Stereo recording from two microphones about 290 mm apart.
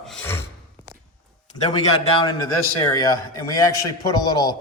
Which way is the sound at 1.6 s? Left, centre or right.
Centre.